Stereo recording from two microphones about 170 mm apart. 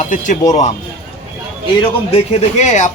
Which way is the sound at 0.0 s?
45° left (ahead or behind).